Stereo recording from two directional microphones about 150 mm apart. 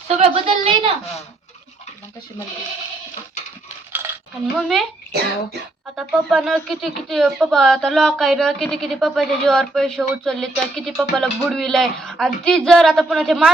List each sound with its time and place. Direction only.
0.1 s a sound: 40° right (ahead or behind)
4.5 s speech: centre (ahead or behind)
6.0 s speech: 5° right (ahead or behind)